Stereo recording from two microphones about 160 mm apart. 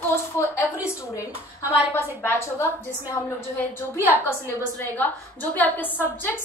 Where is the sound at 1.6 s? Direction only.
10° right (ahead or behind).